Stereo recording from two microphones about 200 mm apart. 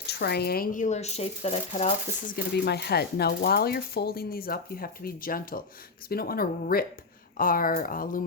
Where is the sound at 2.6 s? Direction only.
55° left (ahead or behind).